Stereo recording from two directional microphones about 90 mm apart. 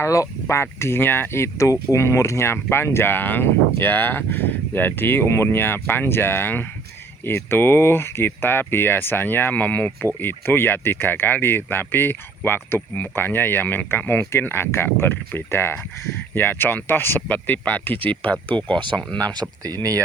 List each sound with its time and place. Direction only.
0.0 s speech: 35° left (ahead or behind); by 18.8 s 15° left (ahead or behind)
19.2 s speech: 50° right (ahead or behind)